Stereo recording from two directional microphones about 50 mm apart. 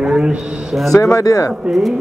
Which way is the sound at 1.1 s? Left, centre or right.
Left.